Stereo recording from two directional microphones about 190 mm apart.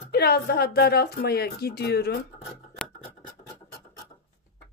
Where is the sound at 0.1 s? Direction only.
55° left (ahead or behind).